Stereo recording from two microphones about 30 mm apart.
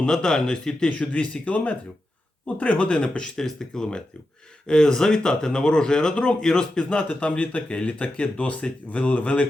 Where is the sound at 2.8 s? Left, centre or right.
Left.